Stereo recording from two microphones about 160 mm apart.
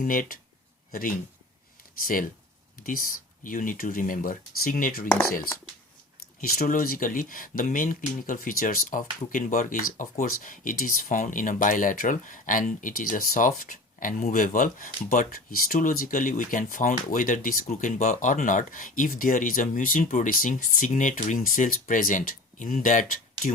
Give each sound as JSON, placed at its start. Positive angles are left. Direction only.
{"t": 0.0, "sound": "speech", "side_deg": 60}
{"t": 6.4, "sound": "speech", "side_deg": 60}